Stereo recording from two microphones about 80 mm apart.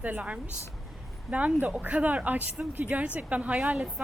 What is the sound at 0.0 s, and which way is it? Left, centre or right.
Speech, centre.